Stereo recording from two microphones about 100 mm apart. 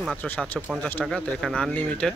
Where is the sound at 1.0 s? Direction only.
5° left (ahead or behind).